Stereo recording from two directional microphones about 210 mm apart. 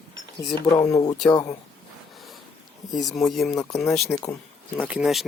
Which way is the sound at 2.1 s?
Centre (ahead or behind).